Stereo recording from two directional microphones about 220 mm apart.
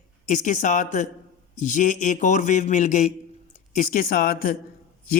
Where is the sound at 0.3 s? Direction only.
35° left (ahead or behind).